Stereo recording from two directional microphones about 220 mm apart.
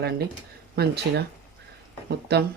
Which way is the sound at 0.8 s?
45° right (ahead or behind).